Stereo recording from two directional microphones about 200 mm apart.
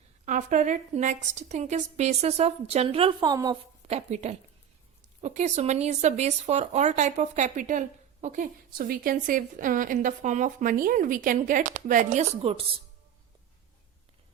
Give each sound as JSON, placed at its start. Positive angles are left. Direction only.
{"t": 0.3, "sound": "speech", "side_deg": -40}
{"t": 3.8, "sound": "speech", "side_deg": -30}